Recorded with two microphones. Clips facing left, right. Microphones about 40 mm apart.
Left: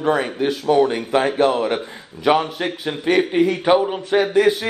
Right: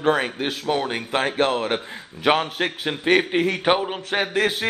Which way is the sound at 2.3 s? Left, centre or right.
Right.